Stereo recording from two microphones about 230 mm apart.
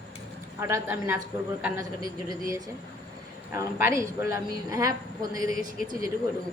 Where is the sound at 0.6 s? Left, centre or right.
Centre.